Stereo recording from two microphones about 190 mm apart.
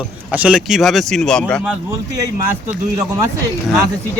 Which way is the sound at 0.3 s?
5° right (ahead or behind).